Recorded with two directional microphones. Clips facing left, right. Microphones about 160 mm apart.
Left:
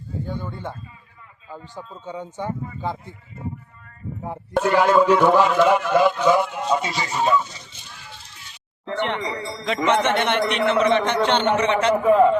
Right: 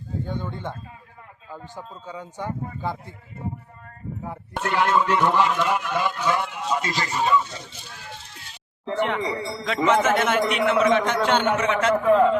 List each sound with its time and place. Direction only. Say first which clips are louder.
0.3 s speech: left 1 dB; 10° left (ahead or behind)
4.5 s speech: left 5 dB; centre (ahead or behind)
9.0 s speech: right 1 dB; centre (ahead or behind)
9.2 s speech: right 1 dB; 25° right (ahead or behind)
9.6 s a man's voice: even; centre (ahead or behind)